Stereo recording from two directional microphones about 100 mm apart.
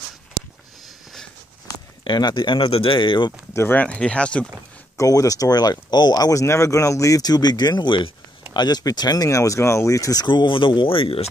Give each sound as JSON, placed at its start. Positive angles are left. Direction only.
{"t": 2.0, "sound": "speech", "side_deg": 50}
{"t": 3.5, "sound": "speech", "side_deg": 20}
{"t": 3.8, "sound": "speech", "side_deg": 10}
{"t": 4.9, "sound": "speech", "side_deg": 35}
{"t": 10.2, "sound": "speech", "side_deg": 50}